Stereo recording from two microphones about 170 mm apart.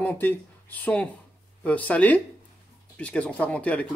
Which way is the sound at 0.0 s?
10° left (ahead or behind).